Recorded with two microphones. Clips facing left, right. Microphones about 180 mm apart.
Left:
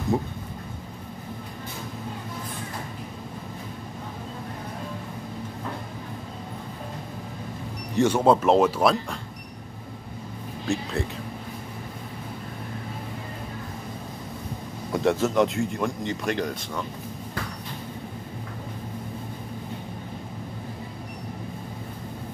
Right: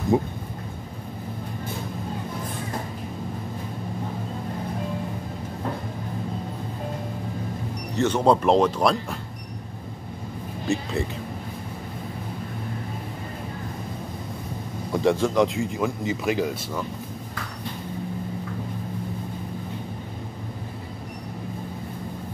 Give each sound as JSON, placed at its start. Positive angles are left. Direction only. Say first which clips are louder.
{"t": 0.1, "sound": "speech", "louder": "right 6 dB", "side_deg": -15}
{"t": 7.9, "sound": "speech", "louder": "left 1 dB", "side_deg": 10}
{"t": 10.7, "sound": "speech", "louder": "right 2 dB", "side_deg": 0}
{"t": 14.9, "sound": "speech", "louder": "right 1 dB", "side_deg": 0}